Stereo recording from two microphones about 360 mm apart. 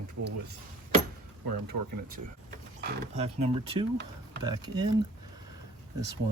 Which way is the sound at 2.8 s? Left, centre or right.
Centre.